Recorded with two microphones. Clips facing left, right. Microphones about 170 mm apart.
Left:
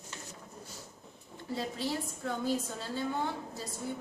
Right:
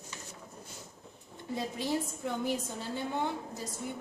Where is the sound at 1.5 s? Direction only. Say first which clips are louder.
Right 2 dB; 15° right (ahead or behind).